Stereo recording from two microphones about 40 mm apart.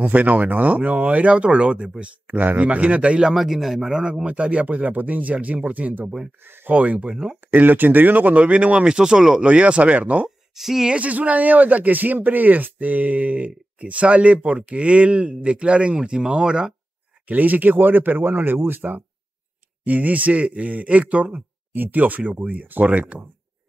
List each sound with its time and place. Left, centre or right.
0.1 s speech: right
2.2 s speech: right
3.3 s a man's voice: centre
4.0 s speech: right
6.4 s a sound: right
6.7 s speech: right
7.5 s speech: right
10.5 s speech: centre
10.9 s speech: right
17.3 s speech: right